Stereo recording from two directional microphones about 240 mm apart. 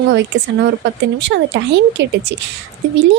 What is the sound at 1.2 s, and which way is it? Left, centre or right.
A woman's voice, right.